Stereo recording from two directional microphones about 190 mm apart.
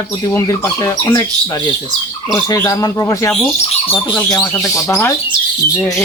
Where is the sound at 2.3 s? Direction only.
15° left (ahead or behind).